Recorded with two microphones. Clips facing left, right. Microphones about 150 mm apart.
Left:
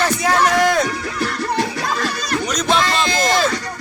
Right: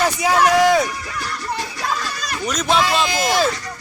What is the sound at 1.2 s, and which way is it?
Music, 65° left (ahead or behind).